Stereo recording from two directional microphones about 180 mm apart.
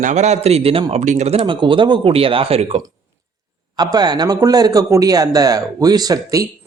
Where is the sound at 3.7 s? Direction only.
20° right (ahead or behind).